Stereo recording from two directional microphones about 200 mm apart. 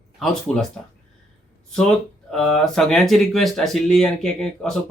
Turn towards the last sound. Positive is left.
turn(degrees=5)  # may be behind; listen again after turning